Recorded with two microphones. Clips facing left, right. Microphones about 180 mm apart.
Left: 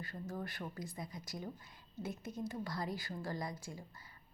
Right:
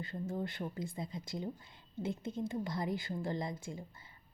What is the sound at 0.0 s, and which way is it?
A woman's voice, 25° right (ahead or behind).